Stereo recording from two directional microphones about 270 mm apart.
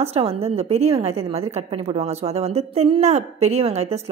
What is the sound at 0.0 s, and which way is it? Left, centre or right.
Speech, right.